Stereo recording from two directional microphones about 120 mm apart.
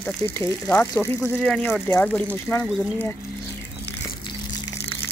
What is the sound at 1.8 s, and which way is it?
Speech, 20° left (ahead or behind).